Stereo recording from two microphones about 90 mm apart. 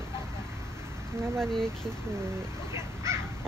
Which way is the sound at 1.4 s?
5° left (ahead or behind).